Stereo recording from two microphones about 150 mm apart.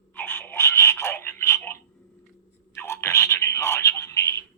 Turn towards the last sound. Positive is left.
turn(degrees=20)  # may be behind; listen again after turning